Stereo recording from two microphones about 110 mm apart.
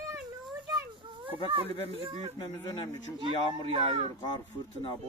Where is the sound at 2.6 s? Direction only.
45° left (ahead or behind).